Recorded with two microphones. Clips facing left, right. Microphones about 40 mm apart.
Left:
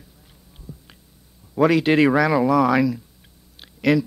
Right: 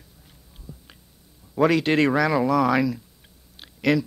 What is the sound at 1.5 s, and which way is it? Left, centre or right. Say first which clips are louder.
Speech: left 3 dB; centre.